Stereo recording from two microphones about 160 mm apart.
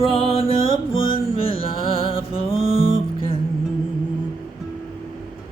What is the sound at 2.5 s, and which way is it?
Music, 45° right (ahead or behind).